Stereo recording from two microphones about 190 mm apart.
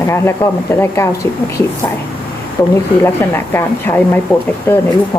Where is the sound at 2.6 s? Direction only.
15° left (ahead or behind).